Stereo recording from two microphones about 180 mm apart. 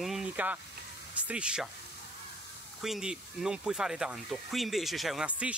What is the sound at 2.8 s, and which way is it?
Speech, centre (ahead or behind).